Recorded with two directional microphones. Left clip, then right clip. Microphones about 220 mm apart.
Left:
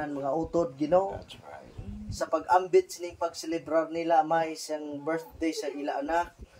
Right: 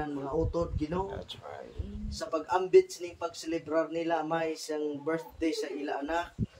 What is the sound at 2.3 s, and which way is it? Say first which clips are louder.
Speech: left 1 dB; 30° left (ahead or behind).